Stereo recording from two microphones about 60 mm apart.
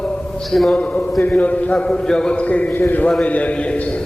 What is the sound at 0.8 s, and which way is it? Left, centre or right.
A man's voice, left.